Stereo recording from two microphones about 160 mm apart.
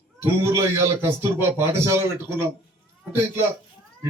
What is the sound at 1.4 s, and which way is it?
A man's voice, 15° right (ahead or behind).